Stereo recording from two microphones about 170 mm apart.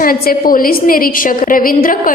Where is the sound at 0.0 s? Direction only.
55° left (ahead or behind).